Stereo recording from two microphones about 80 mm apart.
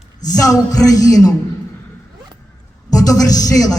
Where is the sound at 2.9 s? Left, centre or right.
Left.